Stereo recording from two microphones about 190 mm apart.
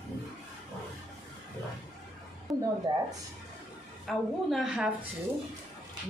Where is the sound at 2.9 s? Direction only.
20° right (ahead or behind).